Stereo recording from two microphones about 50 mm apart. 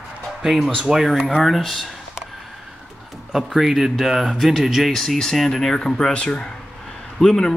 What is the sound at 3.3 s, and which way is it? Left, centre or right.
Speech, centre.